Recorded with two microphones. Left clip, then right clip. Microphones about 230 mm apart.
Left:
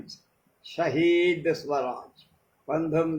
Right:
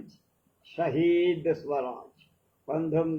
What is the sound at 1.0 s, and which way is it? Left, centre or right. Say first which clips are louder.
A man's voice: left 2 dB; left.